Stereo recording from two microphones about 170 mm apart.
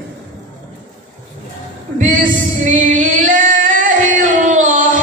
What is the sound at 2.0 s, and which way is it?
Female singing, 50° right (ahead or behind).